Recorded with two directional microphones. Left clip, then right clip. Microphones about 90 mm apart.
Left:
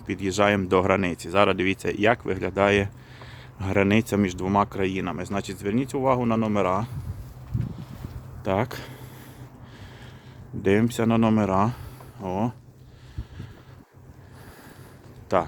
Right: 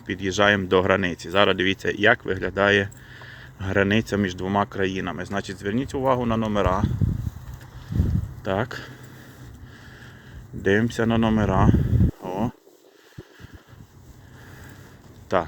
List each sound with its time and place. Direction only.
0.1 s speech: 20° left (ahead or behind)
8.4 s speech: 35° left (ahead or behind)
10.6 s speech: 25° left (ahead or behind)
12.2 s a sound: 15° left (ahead or behind)
15.3 s speech: 20° left (ahead or behind)